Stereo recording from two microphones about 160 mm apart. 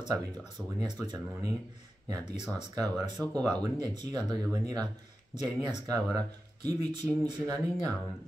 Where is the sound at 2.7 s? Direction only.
25° right (ahead or behind).